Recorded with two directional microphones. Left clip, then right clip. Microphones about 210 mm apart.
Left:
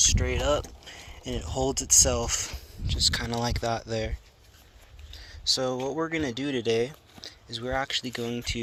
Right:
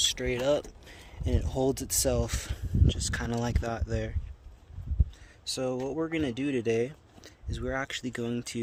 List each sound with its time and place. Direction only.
0.0 s speech: 15° right (ahead or behind)
5.2 s a sound: 5° right (ahead or behind)
5.9 s speech: 10° right (ahead or behind)